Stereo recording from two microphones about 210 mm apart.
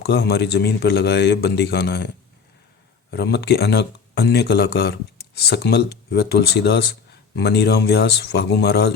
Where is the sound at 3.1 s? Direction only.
50° left (ahead or behind).